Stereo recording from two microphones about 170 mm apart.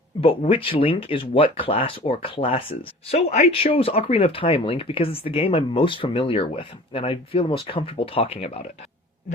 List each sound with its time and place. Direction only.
0.2 s speech: 30° left (ahead or behind)